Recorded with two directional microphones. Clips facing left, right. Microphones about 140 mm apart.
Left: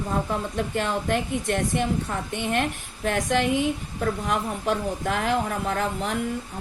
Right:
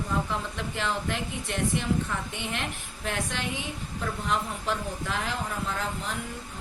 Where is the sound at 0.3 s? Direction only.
50° left (ahead or behind).